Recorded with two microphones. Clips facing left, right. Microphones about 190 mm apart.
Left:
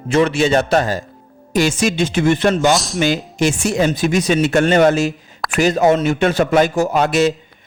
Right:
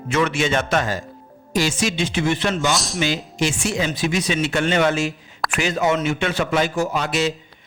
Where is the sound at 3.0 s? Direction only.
45° left (ahead or behind).